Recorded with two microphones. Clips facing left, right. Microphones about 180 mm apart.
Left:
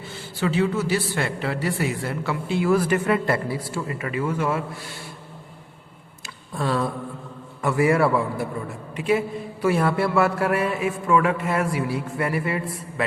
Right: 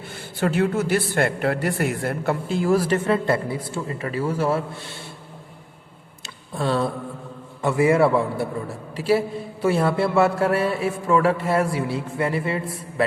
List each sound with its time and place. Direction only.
0.0 s a man's voice: 55° right (ahead or behind); by 4.9 s 25° right (ahead or behind)
6.2 s tick: 30° right (ahead or behind)
7.6 s a man's voice: 25° right (ahead or behind)